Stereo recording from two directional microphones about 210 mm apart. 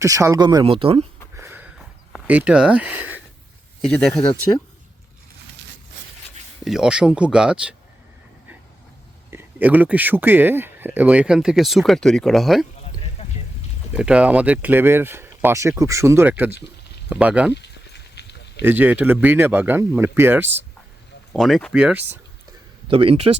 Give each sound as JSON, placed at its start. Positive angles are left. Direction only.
{"t": 0.0, "sound": "speech", "side_deg": -15}
{"t": 1.4, "sound": "sniff", "side_deg": -10}
{"t": 2.1, "sound": "speech", "side_deg": -5}
{"t": 3.8, "sound": "speech", "side_deg": 5}
{"t": 4.5, "sound": "speech", "side_deg": 15}
{"t": 6.7, "sound": "speech", "side_deg": -5}
{"t": 9.3, "sound": "speech", "side_deg": -10}
{"t": 13.2, "sound": "vehicle", "side_deg": 30}
{"t": 13.9, "sound": "speech", "side_deg": -5}
{"t": 17.5, "sound": "a sound", "side_deg": 55}
{"t": 18.6, "sound": "speech", "side_deg": -10}
{"t": 21.3, "sound": "speech", "side_deg": 0}
{"t": 22.9, "sound": "speech", "side_deg": -25}